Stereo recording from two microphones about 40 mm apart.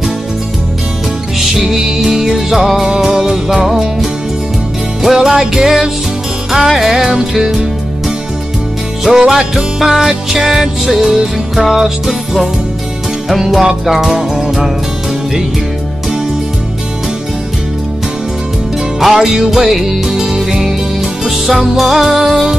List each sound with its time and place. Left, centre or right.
1.4 s music: centre
5.0 s music: centre
7.0 s music: centre
9.0 s music: centre
18.9 s music: centre